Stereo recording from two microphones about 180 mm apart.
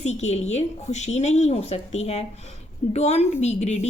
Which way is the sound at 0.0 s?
40° left (ahead or behind).